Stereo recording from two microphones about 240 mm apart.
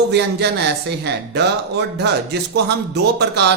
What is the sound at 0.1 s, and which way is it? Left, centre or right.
Speech, right.